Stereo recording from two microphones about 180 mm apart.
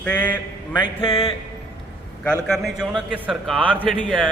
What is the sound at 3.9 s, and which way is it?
Speech, 5° left (ahead or behind).